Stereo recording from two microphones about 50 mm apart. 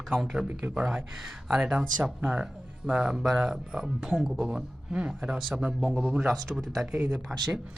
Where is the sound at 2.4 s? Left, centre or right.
Right.